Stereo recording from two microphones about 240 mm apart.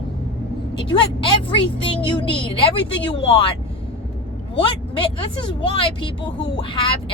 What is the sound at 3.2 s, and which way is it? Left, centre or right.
Speech, left.